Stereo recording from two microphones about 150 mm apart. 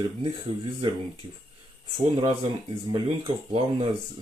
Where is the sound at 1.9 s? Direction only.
35° right (ahead or behind).